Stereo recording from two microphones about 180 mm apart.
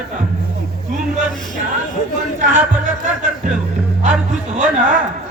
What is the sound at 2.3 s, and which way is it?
Speech, 45° right (ahead or behind).